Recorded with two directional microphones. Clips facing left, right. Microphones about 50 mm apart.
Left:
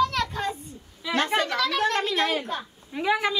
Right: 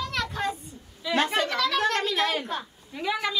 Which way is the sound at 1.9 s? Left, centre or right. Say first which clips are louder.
Left 1 dB; centre.